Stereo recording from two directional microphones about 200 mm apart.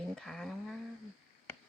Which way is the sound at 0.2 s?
Centre (ahead or behind).